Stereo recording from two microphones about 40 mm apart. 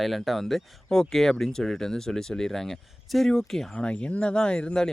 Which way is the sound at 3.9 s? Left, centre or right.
Left.